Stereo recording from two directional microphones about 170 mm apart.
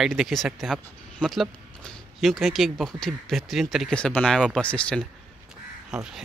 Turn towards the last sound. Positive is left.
turn(degrees=-5)  # may be behind; listen again after turning